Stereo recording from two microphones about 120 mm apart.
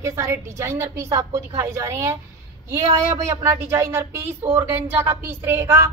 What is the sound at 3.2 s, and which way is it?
Speech, 25° right (ahead or behind).